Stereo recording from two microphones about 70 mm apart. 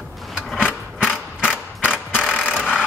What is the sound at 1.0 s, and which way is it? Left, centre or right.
Mechanisms, centre.